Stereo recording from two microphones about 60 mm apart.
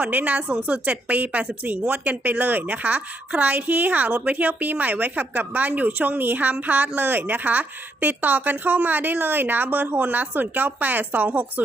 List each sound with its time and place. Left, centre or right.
0.0 s a woman's voice: right